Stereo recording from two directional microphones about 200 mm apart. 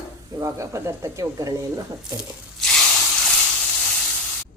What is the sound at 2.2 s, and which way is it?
Tearing, 5° left (ahead or behind).